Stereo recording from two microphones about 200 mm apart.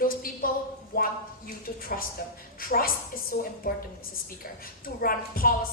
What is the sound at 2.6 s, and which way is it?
A woman's voice, 45° left (ahead or behind).